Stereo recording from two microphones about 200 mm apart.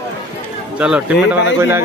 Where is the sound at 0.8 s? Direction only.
5° right (ahead or behind).